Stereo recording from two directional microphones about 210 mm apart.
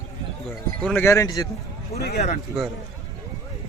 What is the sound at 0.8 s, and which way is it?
Speech, 10° left (ahead or behind).